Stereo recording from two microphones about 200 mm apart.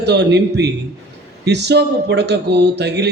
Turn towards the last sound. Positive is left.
turn(degrees=-55)  # may be behind; listen again after turning